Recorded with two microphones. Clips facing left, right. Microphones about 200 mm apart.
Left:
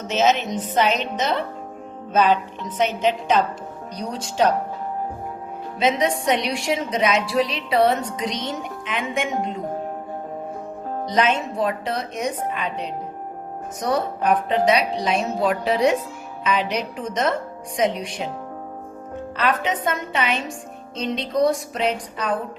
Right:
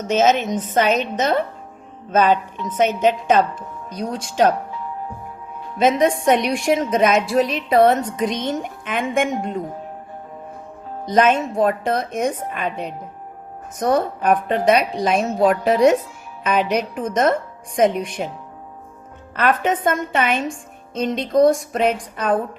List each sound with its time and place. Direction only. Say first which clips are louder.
0.1 s a woman's voice: right 3 dB; 50° right (ahead or behind)
5.8 s a woman's voice: right 4 dB; 50° right (ahead or behind)
11.1 s a woman's voice: right 5 dB; 50° right (ahead or behind)
19.4 s a woman's voice: right 4 dB; 50° right (ahead or behind)